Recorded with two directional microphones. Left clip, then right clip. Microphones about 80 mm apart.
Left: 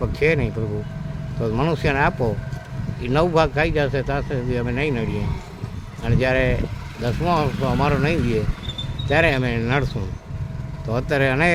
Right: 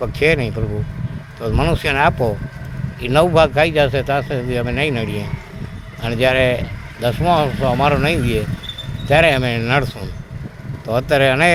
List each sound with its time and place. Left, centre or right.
0.0 s speech: centre